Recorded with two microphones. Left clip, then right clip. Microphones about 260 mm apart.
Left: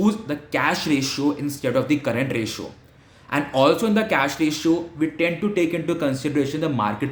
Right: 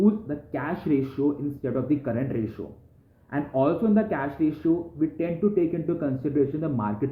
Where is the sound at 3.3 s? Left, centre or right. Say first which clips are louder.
Left 6 dB; centre.